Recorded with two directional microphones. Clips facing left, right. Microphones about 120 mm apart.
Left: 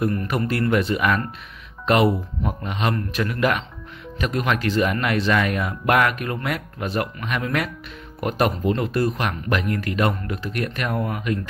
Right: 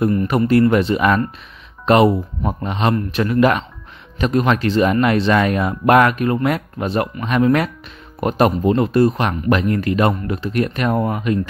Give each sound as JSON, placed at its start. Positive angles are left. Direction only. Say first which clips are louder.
{"t": 0.1, "sound": "speech", "louder": "right 7 dB", "side_deg": -15}
{"t": 0.5, "sound": "speech", "louder": "right 7 dB", "side_deg": -25}
{"t": 2.4, "sound": "a man's voice", "louder": "right 5 dB", "side_deg": -35}